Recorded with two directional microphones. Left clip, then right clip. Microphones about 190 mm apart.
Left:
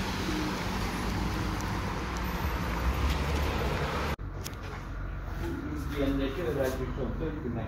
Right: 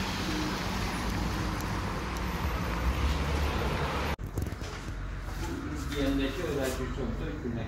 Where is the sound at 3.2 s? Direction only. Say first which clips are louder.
Right 1 dB; 50° left (ahead or behind).